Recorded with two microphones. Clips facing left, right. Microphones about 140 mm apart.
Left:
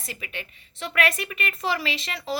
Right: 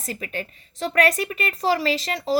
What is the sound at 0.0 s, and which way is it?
A woman's voice, 40° right (ahead or behind).